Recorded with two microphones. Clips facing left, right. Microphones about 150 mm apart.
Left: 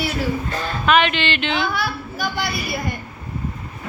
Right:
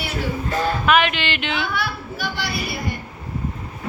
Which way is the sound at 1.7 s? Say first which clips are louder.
Left 1 dB; 40° left (ahead or behind).